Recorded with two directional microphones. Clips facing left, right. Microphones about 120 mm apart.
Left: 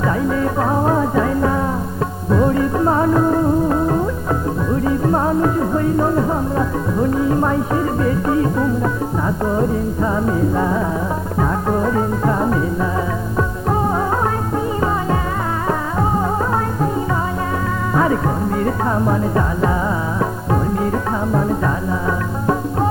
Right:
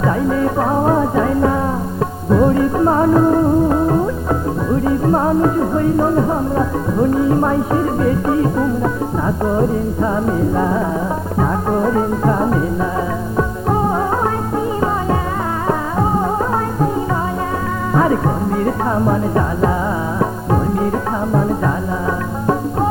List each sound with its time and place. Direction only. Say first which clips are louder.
0.0 s music: right 2 dB; 25° right (ahead or behind)
17.9 s music: right 2 dB; 25° right (ahead or behind)